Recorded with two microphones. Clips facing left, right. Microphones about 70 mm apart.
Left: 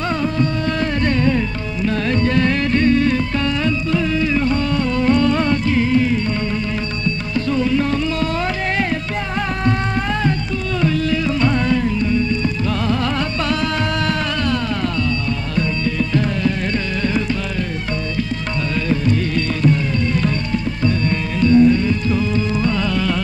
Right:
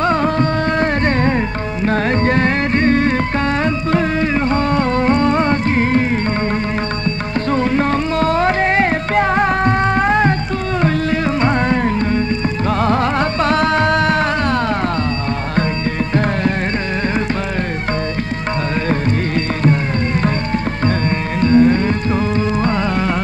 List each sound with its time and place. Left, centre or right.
0.0 s music: right
7.5 s music: right
21.4 s music: right